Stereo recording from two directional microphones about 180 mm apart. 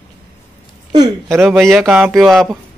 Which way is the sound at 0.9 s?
20° right (ahead or behind).